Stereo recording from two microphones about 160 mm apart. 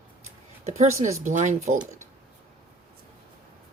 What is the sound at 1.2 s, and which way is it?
Speech, 50° right (ahead or behind).